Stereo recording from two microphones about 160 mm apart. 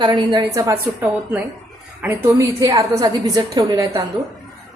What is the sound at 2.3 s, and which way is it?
A woman's voice, 20° right (ahead or behind).